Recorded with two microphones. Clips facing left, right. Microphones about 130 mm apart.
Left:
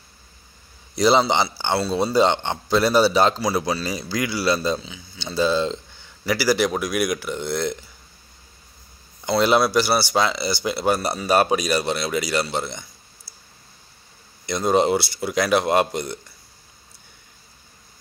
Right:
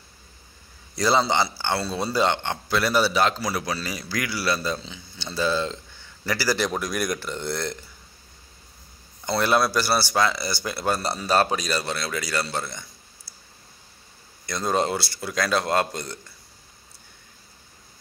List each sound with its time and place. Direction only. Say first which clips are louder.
0.9 s a man's voice: left 4 dB; 15° left (ahead or behind)
9.2 s a man's voice: left 4 dB; 15° left (ahead or behind)
14.4 s a man's voice: left 5 dB; 15° left (ahead or behind)